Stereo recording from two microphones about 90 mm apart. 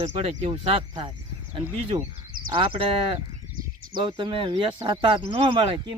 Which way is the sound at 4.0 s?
60° right (ahead or behind).